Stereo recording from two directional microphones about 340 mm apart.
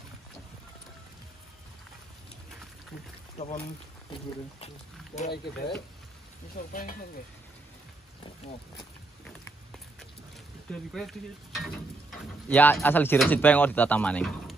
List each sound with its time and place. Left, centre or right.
3.3 s speech: centre
5.1 s speech: left
10.7 s speech: centre